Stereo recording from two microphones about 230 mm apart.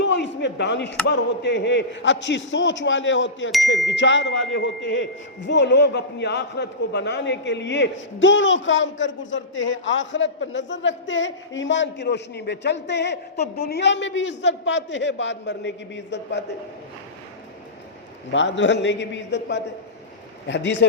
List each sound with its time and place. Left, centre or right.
0.0 s a sound: left
1.0 s speech: left
18.3 s speech: left